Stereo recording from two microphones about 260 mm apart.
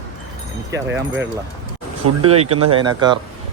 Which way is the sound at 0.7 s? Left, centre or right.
Centre.